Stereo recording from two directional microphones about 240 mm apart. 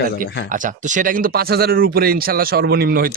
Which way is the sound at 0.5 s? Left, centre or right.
Right.